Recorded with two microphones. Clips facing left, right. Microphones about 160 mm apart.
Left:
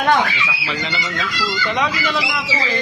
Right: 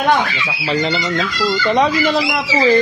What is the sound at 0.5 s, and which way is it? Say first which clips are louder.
A man's voice: right 7 dB; 40° right (ahead or behind).